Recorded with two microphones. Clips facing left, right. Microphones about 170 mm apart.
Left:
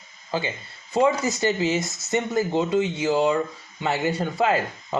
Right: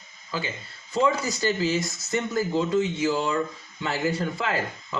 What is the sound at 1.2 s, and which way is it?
Speech, 20° left (ahead or behind).